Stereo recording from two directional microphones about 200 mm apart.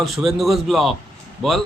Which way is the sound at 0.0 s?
Centre (ahead or behind).